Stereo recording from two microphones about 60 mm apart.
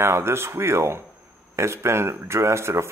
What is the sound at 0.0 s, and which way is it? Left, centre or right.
Speech, right.